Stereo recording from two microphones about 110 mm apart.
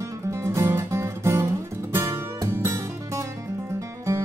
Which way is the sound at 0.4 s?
25° right (ahead or behind).